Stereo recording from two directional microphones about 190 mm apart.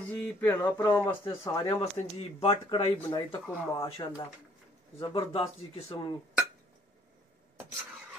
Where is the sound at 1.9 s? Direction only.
35° left (ahead or behind).